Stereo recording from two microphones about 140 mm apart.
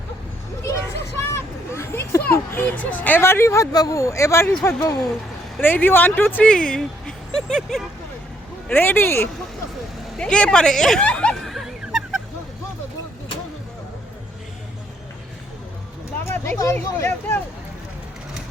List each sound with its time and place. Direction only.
1.2 s vehicle: 20° left (ahead or behind)
2.5 s speech: 15° left (ahead or behind)
5.5 s speech: 15° left (ahead or behind)
8.6 s speech: 15° left (ahead or behind)
10.2 s a sound: 5° left (ahead or behind)
16.2 s speech: 15° left (ahead or behind)